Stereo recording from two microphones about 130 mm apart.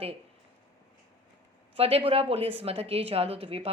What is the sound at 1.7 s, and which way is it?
A woman's voice, 50° right (ahead or behind).